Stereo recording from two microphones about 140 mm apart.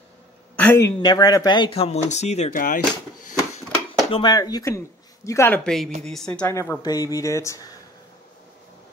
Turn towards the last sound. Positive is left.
turn(degrees=25)  # may be behind; listen again after turning